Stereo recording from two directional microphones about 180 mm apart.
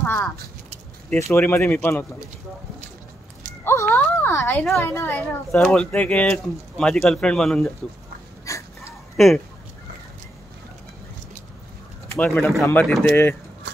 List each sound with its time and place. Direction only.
0.0 s speech: 10° left (ahead or behind)
1.3 s a child's voice: 15° left (ahead or behind)
3.6 s a child's voice: 15° left (ahead or behind)
8.5 s wheeze: 20° left (ahead or behind)
9.1 s speech: centre (ahead or behind)
12.1 s a child's voice: 10° left (ahead or behind)